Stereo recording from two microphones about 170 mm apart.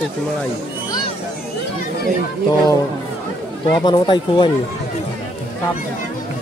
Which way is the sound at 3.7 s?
25° left (ahead or behind).